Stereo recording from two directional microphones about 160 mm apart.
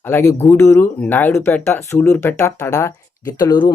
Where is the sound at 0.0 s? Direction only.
15° left (ahead or behind).